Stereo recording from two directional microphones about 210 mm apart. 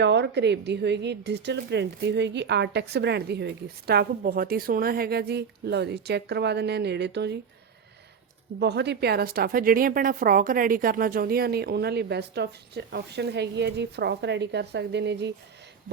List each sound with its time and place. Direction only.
0.0 s speech: 55° right (ahead or behind)
8.5 s speech: 50° right (ahead or behind)